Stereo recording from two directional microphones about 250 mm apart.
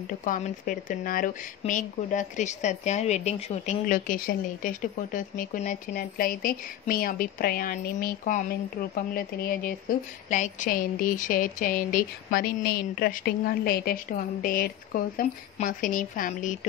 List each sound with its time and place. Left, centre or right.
0.2 s speech: left